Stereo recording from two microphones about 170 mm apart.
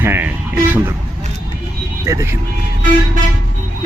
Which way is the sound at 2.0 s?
20° right (ahead or behind).